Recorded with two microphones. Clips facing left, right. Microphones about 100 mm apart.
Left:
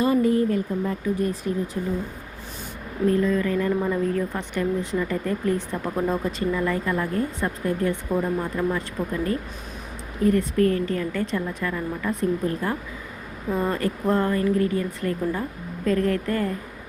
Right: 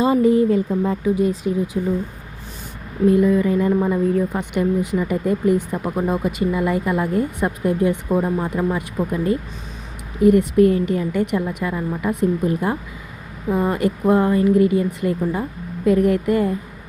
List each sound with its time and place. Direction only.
0.0 s speech: 20° right (ahead or behind)
3.1 s speech: 15° right (ahead or behind)